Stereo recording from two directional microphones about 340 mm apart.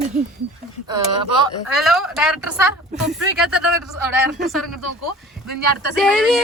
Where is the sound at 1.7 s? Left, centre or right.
Centre.